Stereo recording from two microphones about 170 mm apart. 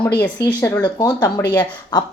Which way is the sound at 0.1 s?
20° left (ahead or behind).